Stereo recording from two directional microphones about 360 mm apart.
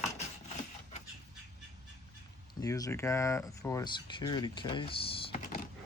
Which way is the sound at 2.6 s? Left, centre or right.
Centre.